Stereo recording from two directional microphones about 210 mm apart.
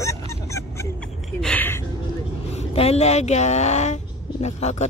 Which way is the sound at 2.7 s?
30° left (ahead or behind).